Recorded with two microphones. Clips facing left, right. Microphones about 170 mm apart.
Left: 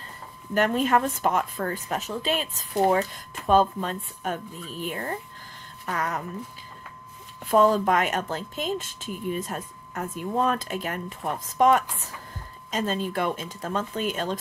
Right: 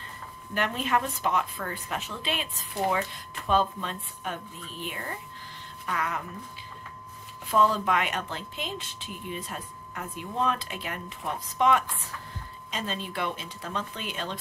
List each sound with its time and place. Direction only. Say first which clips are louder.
0.6 s speech: left 6 dB; 45° left (ahead or behind)
7.5 s speech: left 5 dB; 45° left (ahead or behind)